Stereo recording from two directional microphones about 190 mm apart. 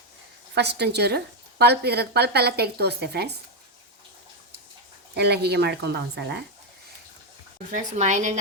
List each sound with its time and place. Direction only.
0.5 s a woman's voice: 60° right (ahead or behind)
5.1 s a woman's voice: 60° right (ahead or behind)
7.7 s a woman's voice: 40° right (ahead or behind)